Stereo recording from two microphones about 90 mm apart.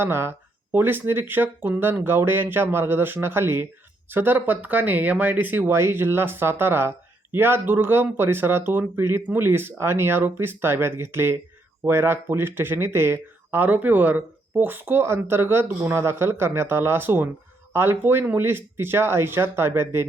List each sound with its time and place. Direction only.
0.0 s speech: 25° right (ahead or behind)